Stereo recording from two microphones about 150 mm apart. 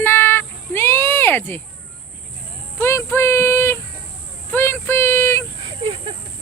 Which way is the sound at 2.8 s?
20° left (ahead or behind).